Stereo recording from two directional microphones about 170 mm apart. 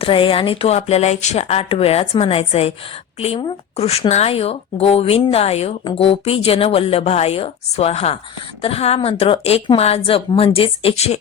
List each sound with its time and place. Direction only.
0.0 s speech: 30° left (ahead or behind)